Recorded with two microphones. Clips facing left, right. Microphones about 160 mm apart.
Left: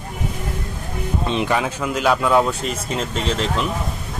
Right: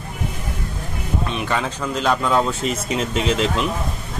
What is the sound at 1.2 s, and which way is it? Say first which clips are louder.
Speech: left 6 dB; 25° left (ahead or behind).